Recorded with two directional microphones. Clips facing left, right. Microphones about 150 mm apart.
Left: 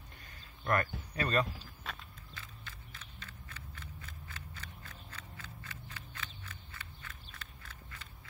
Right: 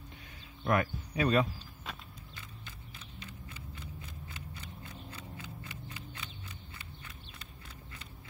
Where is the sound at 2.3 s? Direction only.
15° right (ahead or behind).